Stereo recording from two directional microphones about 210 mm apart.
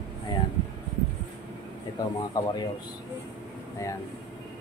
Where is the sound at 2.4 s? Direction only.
15° left (ahead or behind).